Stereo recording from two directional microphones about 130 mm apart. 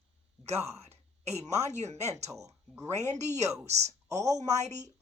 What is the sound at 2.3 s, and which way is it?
Speech, 25° right (ahead or behind).